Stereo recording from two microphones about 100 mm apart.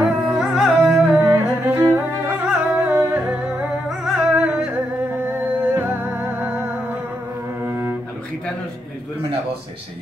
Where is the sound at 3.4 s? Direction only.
15° right (ahead or behind).